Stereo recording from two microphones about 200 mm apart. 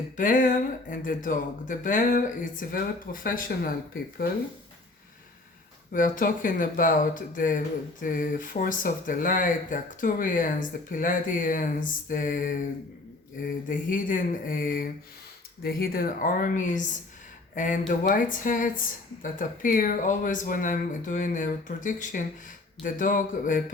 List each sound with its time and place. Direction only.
0.2 s speech: 40° left (ahead or behind)
5.9 s speech: 40° left (ahead or behind)